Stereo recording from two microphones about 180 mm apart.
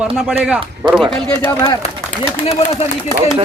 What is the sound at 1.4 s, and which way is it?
Speech, 20° left (ahead or behind).